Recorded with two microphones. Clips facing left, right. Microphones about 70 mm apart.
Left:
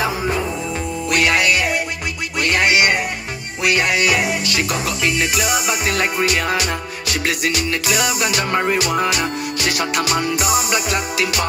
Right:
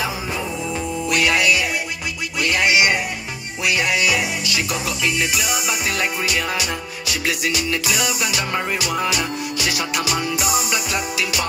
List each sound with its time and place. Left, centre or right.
1.0 s music: left